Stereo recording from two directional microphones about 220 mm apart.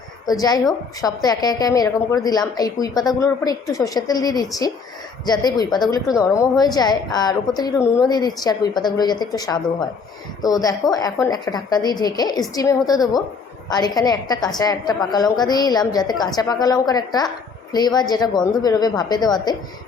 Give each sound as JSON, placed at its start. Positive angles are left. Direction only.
{"t": 0.3, "sound": "a woman's voice", "side_deg": 15}